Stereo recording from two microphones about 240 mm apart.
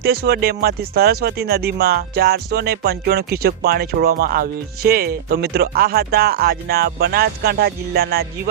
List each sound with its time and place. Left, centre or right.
0.3 s speech: right